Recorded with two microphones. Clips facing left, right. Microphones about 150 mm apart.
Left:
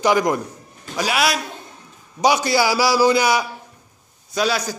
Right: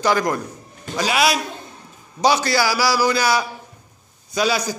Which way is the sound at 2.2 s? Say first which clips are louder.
Left 1 dB; 15° left (ahead or behind).